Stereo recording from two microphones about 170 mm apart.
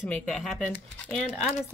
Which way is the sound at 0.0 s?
5° left (ahead or behind).